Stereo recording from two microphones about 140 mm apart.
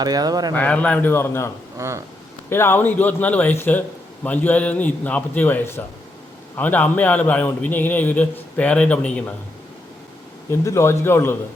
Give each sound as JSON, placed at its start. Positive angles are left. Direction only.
{"t": 0.0, "sound": "speech", "side_deg": -30}
{"t": 0.5, "sound": "a man's voice", "side_deg": 10}
{"t": 1.8, "sound": "speech", "side_deg": -25}
{"t": 2.5, "sound": "a man's voice", "side_deg": 15}
{"t": 10.5, "sound": "a man's voice", "side_deg": 20}